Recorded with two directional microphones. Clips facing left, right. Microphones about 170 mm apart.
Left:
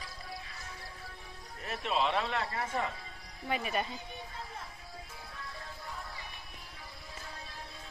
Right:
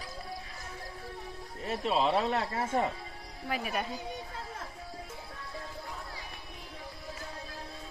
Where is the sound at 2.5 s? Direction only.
25° right (ahead or behind).